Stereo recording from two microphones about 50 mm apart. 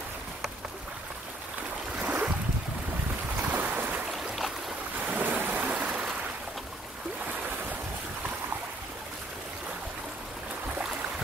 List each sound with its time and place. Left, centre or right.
2.0 s boat: right
3.4 s boat: right
4.9 s ocean: right